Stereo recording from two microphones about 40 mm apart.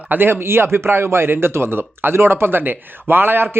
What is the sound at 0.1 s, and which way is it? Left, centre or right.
A man's voice, right.